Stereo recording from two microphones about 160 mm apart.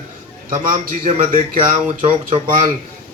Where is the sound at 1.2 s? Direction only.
60° right (ahead or behind).